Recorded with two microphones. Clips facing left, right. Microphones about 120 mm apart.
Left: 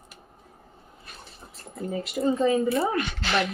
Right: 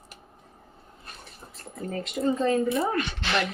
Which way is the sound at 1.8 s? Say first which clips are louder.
Left 1 dB; 5° left (ahead or behind).